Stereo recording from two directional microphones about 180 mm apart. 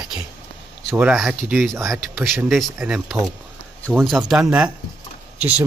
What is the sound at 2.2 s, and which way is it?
Speech, centre (ahead or behind).